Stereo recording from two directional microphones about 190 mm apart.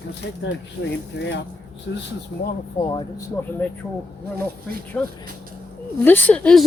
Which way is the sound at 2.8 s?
25° left (ahead or behind).